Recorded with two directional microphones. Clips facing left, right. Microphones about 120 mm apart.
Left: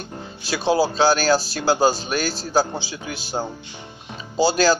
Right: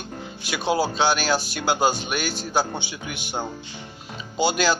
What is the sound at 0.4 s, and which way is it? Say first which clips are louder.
Speech: left 4 dB; 35° left (ahead or behind).